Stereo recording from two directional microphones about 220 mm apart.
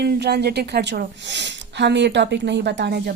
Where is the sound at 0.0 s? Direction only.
50° right (ahead or behind).